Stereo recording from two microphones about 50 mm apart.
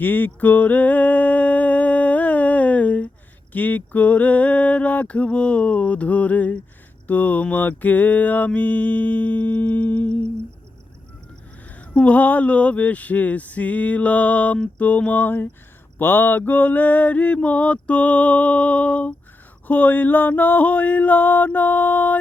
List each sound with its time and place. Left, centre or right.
0.0 s a sound: left
3.5 s mantra: left
11.7 s mantra: left